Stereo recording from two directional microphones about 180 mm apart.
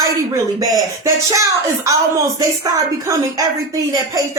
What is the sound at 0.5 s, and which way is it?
Speech, 20° right (ahead or behind).